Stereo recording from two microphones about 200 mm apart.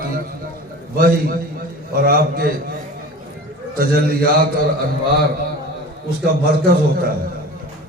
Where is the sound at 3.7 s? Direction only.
50° right (ahead or behind).